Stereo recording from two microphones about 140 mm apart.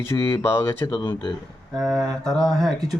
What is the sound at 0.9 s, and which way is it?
Speech, 35° left (ahead or behind).